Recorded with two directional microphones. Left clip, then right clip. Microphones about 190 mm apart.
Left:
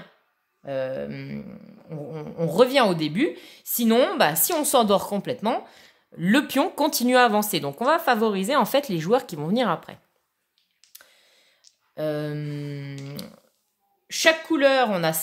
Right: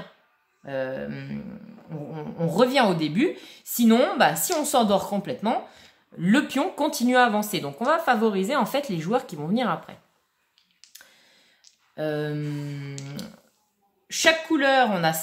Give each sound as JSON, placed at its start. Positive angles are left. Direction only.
{"t": 0.6, "sound": "mantra", "side_deg": 40}
{"t": 1.9, "sound": "a woman's voice", "side_deg": 40}
{"t": 10.8, "sound": "a sound", "side_deg": 0}
{"t": 11.9, "sound": "a woman's voice", "side_deg": 45}